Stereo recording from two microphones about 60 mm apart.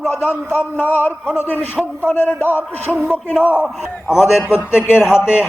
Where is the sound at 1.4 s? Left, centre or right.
Left.